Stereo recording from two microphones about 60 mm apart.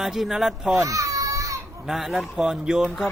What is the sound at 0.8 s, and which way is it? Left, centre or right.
Baby cry, right.